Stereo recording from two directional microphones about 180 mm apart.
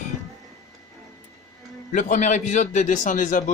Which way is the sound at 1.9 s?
45° left (ahead or behind).